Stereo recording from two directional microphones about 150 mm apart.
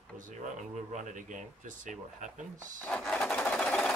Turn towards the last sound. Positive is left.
turn(degrees=5)  # may be behind; listen again after turning